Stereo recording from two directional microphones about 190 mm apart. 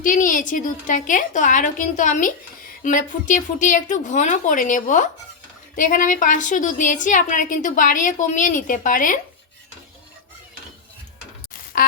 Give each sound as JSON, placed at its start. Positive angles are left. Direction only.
{"t": 0.0, "sound": "a woman's voice", "side_deg": 45}
{"t": 11.7, "sound": "quack", "side_deg": 50}